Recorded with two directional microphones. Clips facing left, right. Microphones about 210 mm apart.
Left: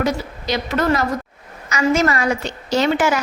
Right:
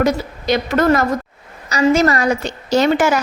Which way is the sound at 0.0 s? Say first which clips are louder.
Right 4 dB; 50° right (ahead or behind).